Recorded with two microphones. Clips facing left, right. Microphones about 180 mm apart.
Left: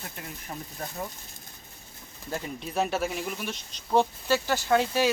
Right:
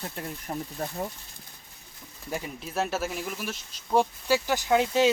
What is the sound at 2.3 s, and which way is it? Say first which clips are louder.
Speech: even; 5° right (ahead or behind).